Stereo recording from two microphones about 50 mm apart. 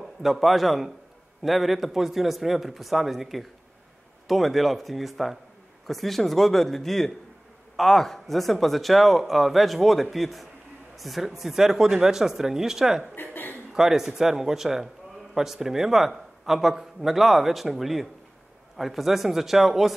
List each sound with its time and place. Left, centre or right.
0.0 s a man's voice: centre
13.1 s a sound: left
13.7 s a man's voice: centre